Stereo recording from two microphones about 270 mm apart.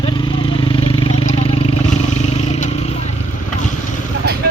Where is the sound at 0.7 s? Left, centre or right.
Centre.